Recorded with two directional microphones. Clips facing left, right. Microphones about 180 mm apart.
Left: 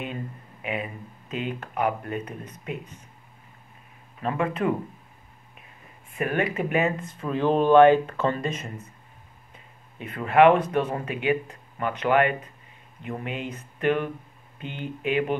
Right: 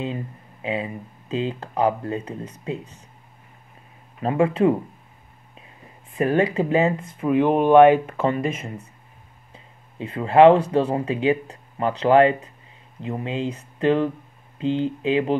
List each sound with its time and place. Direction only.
0.0 s a sound: 25° right (ahead or behind)
1.3 s speech: 25° right (ahead or behind)
4.2 s speech: 30° right (ahead or behind)
6.1 s speech: 35° right (ahead or behind)
7.2 s speech: 15° right (ahead or behind)
9.9 s speech: 25° right (ahead or behind)